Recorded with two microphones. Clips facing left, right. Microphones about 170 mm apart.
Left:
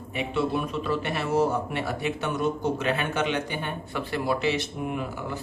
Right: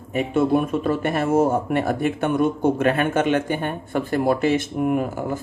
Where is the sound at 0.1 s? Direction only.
45° right (ahead or behind).